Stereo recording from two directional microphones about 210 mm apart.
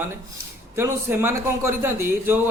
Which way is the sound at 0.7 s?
10° right (ahead or behind).